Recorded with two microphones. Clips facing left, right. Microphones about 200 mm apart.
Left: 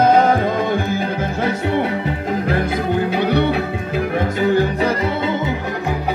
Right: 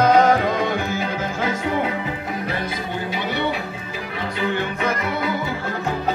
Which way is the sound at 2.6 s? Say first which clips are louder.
Left 8 dB; 55° left (ahead or behind).